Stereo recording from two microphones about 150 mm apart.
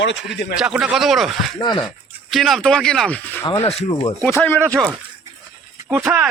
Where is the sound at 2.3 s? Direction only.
Centre (ahead or behind).